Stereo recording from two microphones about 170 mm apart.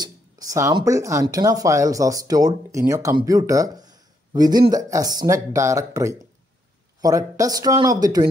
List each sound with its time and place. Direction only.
0.0 s speech: 20° right (ahead or behind)